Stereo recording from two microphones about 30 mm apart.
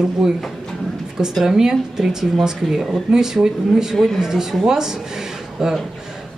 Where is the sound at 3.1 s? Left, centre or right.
Right.